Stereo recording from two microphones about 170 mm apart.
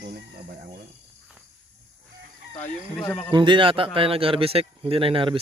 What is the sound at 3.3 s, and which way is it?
Speech, 30° right (ahead or behind).